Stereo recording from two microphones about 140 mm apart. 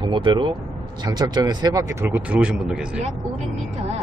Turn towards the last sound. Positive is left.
turn(degrees=-5)  # may be behind; listen again after turning